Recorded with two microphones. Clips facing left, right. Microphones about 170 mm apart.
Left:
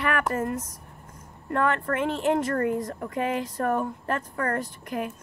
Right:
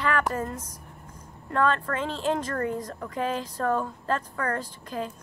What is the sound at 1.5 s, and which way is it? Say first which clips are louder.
Speech: even; 20° left (ahead or behind).